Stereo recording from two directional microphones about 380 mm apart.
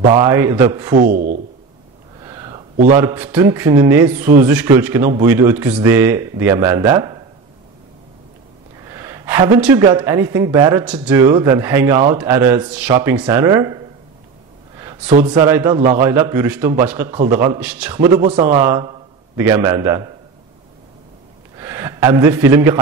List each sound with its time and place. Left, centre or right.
0.0 s a man's voice: centre
0.9 s a man's voice: right
2.2 s a sound: centre
3.0 s a man's voice: centre
8.7 s a man's voice: centre
14.8 s a sound: centre
15.3 s a man's voice: centre
17.2 s a man's voice: centre
17.5 s a man's voice: centre
21.5 s a man's voice: centre